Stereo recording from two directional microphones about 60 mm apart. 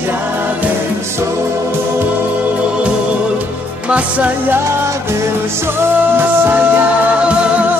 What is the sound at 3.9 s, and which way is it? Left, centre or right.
Music, right.